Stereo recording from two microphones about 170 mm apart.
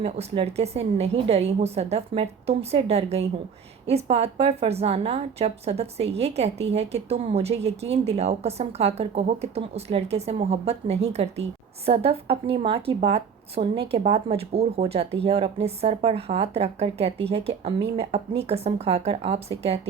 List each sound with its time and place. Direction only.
0.0 s a woman's voice: 35° right (ahead or behind)